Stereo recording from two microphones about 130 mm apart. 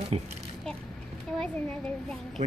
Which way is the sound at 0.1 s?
50° right (ahead or behind).